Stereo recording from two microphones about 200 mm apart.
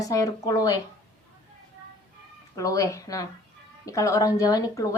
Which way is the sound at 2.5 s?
15° left (ahead or behind).